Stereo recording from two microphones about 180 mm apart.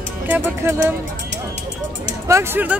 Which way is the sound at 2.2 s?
15° right (ahead or behind).